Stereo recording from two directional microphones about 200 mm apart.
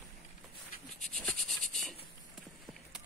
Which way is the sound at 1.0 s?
5° left (ahead or behind).